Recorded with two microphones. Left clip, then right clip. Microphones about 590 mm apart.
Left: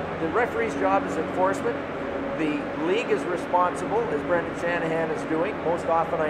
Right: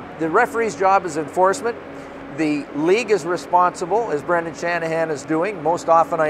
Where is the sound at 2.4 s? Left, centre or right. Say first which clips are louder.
Right 9 dB; right.